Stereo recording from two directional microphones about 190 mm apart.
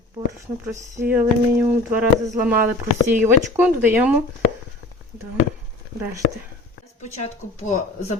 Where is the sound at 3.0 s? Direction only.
10° right (ahead or behind).